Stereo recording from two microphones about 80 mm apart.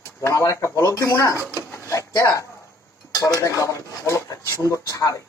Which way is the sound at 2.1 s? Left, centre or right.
Left.